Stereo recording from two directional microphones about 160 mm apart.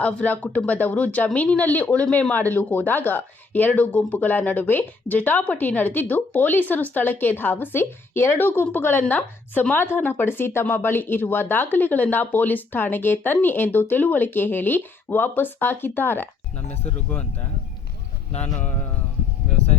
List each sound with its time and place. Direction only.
0.0 s speech: 10° left (ahead or behind)
16.6 s speech: 40° left (ahead or behind)
18.3 s speech: 45° left (ahead or behind)